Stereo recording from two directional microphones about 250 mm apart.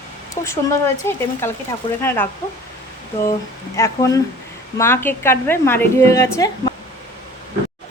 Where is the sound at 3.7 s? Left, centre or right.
Centre.